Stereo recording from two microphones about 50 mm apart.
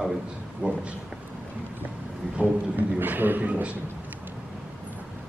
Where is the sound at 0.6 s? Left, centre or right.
Right.